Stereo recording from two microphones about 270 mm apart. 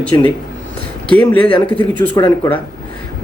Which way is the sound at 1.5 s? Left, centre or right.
Centre.